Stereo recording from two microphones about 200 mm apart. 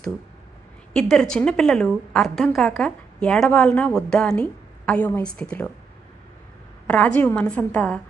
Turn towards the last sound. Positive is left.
turn(degrees=5)  # may be behind; listen again after turning